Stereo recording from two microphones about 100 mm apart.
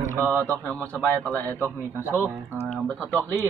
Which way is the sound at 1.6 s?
25° right (ahead or behind).